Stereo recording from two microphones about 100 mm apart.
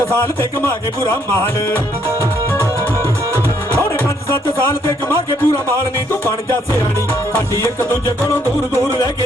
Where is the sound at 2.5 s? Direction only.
25° left (ahead or behind).